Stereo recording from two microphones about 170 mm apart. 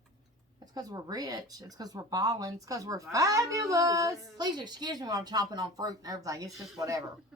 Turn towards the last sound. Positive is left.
turn(degrees=-20)  # may be behind; listen again after turning